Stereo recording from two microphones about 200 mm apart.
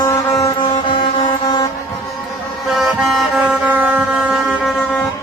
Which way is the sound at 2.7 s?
Centre (ahead or behind).